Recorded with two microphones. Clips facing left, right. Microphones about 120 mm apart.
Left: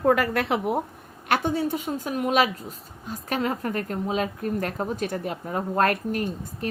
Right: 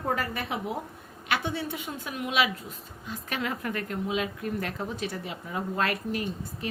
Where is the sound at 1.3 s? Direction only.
45° left (ahead or behind).